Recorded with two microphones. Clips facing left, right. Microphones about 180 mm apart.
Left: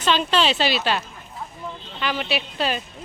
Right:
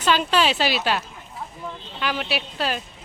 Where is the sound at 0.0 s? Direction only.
5° right (ahead or behind).